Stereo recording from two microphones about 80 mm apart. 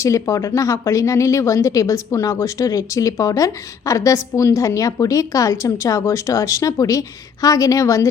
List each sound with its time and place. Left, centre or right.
0.0 s speech: left